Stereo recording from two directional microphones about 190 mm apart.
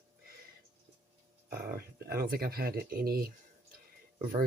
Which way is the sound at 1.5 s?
55° right (ahead or behind).